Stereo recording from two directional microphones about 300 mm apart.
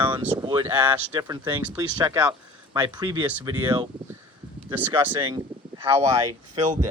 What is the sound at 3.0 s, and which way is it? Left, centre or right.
Speech, centre.